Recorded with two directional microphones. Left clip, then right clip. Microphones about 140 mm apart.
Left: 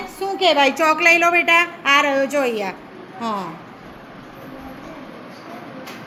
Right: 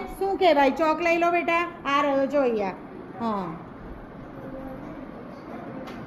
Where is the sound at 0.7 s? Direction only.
30° left (ahead or behind).